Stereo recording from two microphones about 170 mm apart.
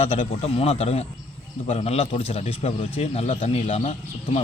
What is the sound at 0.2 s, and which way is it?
Speech, 35° left (ahead or behind).